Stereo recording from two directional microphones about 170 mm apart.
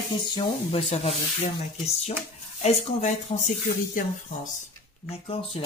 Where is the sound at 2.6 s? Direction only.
40° left (ahead or behind).